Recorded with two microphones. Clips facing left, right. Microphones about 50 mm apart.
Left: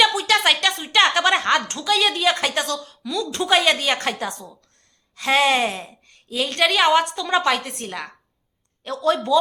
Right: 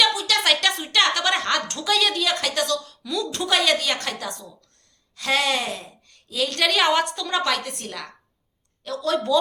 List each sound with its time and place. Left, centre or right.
0.2 s a sound: left
0.4 s a woman's voice: centre
3.0 s a woman's voice: centre
3.5 s a woman's voice: left
5.1 s a woman's voice: centre
6.1 s a sound: left
6.7 s a woman's voice: centre